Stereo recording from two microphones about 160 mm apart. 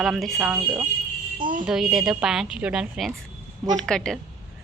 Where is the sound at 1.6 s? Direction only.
5° right (ahead or behind).